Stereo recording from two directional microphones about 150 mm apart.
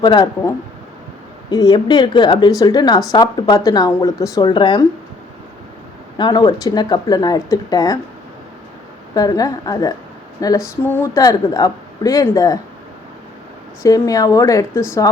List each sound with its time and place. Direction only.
0.0 s speech: 30° left (ahead or behind)
6.1 s speech: 30° left (ahead or behind)
9.1 s speech: 25° left (ahead or behind)
13.8 s speech: 20° left (ahead or behind)